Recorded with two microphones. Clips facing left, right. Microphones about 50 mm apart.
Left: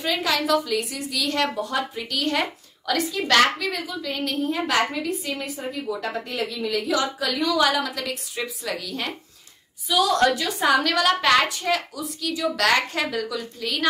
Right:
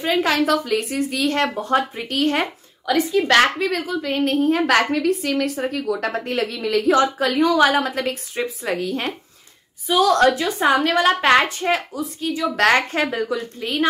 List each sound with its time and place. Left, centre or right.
0.0 s a woman's voice: right
2.9 s a woman's voice: centre
3.5 s a woman's voice: right
6.9 s a woman's voice: right